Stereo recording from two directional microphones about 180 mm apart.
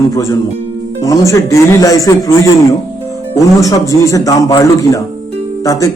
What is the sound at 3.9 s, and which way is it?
A man's voice, 20° left (ahead or behind).